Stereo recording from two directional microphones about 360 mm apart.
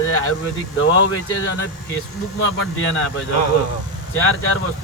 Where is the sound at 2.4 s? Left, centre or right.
Left.